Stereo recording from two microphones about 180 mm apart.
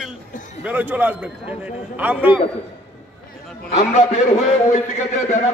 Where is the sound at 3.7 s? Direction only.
35° left (ahead or behind).